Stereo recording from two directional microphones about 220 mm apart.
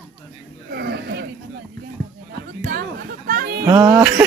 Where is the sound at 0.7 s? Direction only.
45° right (ahead or behind).